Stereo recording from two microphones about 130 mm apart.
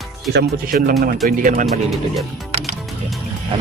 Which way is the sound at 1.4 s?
85° right.